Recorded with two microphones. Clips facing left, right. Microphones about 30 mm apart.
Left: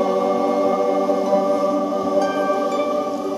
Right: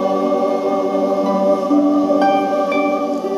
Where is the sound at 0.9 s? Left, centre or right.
Centre.